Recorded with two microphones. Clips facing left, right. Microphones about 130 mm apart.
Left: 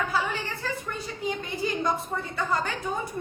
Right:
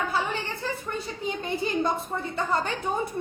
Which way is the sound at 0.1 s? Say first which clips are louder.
Even; 25° right (ahead or behind).